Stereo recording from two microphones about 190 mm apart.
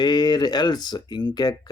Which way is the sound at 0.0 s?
20° left (ahead or behind).